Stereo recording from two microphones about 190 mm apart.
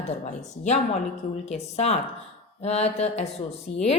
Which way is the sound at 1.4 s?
35° left (ahead or behind).